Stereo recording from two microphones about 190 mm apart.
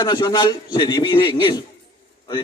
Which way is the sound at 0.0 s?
20° left (ahead or behind).